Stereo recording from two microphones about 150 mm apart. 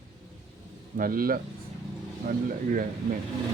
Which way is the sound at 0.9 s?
70° right (ahead or behind).